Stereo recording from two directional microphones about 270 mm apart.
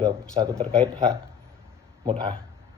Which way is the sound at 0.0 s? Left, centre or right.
Centre.